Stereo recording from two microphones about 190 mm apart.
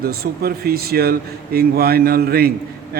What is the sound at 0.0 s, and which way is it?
A man's voice, 55° right (ahead or behind).